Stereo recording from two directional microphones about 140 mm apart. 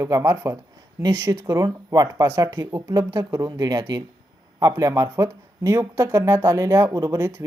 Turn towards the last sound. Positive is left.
turn(degrees=-20)  # may be behind; listen again after turning